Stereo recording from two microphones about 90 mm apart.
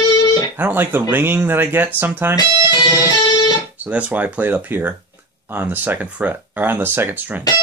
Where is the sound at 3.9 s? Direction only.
15° right (ahead or behind).